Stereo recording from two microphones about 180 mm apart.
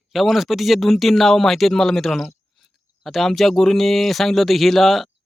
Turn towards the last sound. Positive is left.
turn(degrees=0)  # may be behind; listen again after turning